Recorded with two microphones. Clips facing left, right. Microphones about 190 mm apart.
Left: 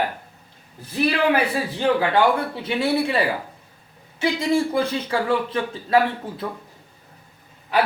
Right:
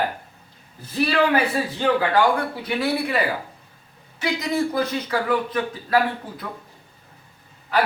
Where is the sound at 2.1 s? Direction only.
25° left (ahead or behind).